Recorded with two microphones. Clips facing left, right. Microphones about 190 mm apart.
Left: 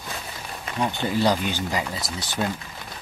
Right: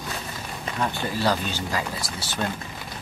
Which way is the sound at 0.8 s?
15° left (ahead or behind).